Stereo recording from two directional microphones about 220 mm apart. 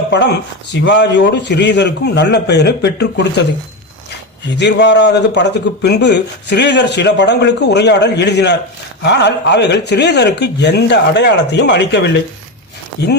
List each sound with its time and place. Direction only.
0.7 s a man's voice: 55° left (ahead or behind)
4.4 s a man's voice: 50° left (ahead or behind)